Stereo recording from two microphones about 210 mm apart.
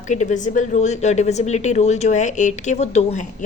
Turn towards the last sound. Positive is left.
turn(degrees=35)  # may be behind; listen again after turning